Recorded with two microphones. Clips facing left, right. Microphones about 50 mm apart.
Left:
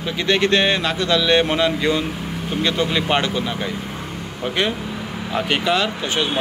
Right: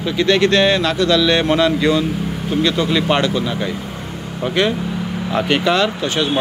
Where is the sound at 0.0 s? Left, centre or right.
Centre.